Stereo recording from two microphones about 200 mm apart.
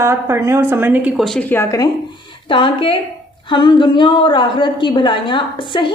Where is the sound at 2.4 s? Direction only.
25° left (ahead or behind).